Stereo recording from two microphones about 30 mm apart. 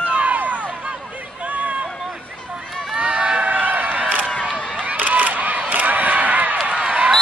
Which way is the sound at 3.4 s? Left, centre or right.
Right.